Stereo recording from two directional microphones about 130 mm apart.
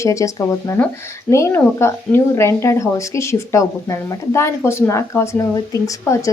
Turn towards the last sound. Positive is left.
turn(degrees=25)  # may be behind; listen again after turning